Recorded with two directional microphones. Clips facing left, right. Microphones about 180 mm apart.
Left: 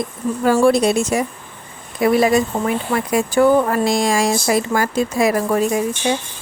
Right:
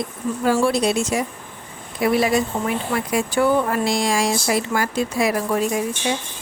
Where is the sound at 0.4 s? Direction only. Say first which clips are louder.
Left 5 dB; 50° left (ahead or behind).